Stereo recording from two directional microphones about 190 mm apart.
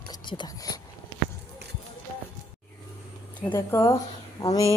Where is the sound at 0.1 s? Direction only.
25° left (ahead or behind).